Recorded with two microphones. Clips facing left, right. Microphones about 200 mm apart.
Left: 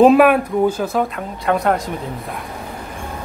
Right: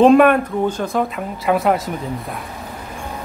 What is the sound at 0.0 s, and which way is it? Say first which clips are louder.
Speech: even; 5° left (ahead or behind).